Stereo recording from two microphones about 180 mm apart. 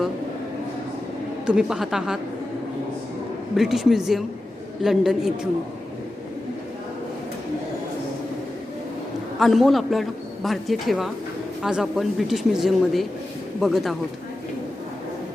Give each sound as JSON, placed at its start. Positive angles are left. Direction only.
{"t": 1.5, "sound": "a man's voice", "side_deg": -5}
{"t": 3.5, "sound": "a man's voice", "side_deg": 0}
{"t": 9.4, "sound": "a man's voice", "side_deg": 0}